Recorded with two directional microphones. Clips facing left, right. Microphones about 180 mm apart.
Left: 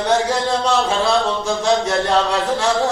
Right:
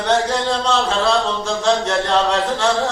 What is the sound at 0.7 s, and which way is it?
Speech, 15° left (ahead or behind).